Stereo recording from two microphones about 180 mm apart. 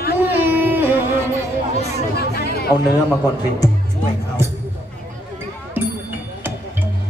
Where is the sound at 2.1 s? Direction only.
60° left (ahead or behind).